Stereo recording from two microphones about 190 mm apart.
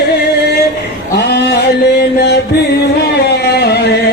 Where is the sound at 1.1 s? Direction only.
60° left (ahead or behind).